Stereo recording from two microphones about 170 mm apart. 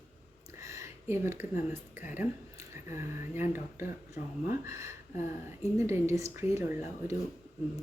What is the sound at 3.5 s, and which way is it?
Speech, 15° right (ahead or behind).